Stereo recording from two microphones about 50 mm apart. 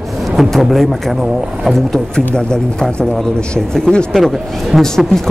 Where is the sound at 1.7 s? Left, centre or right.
Centre.